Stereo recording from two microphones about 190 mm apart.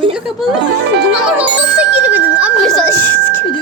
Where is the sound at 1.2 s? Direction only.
5° right (ahead or behind); by 3.4 s 10° left (ahead or behind).